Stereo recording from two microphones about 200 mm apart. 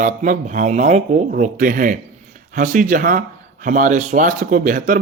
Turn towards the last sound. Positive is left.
turn(degrees=-40)  # may be behind; listen again after turning